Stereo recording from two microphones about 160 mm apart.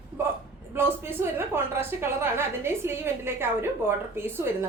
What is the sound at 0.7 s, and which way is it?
A woman's voice, 15° right (ahead or behind).